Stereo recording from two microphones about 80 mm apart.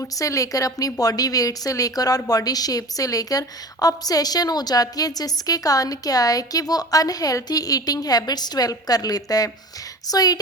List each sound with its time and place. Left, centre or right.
0.0 s a woman's voice: left